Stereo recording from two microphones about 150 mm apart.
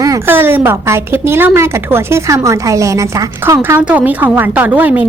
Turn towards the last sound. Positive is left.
turn(degrees=-10)  # may be behind; listen again after turning